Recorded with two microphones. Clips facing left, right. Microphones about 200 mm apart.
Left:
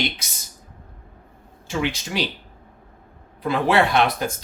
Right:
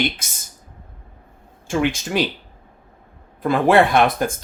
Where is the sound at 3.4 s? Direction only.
50° right (ahead or behind).